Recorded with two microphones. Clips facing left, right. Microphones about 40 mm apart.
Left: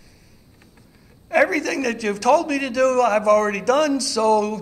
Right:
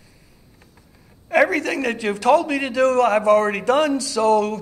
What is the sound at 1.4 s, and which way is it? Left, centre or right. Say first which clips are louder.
A man's voice: even; right.